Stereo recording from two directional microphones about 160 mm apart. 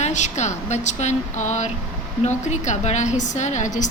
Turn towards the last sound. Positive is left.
turn(degrees=50)  # may be behind; listen again after turning